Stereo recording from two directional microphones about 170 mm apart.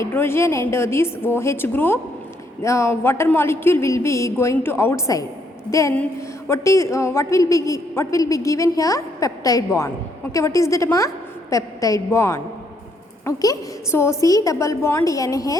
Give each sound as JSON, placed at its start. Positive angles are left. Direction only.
{"t": 0.0, "sound": "a man's voice", "side_deg": 15}